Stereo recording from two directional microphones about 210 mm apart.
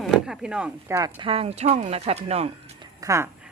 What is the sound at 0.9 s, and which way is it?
Speech, 20° right (ahead or behind).